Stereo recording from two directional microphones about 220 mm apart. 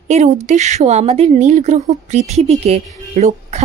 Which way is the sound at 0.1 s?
30° right (ahead or behind).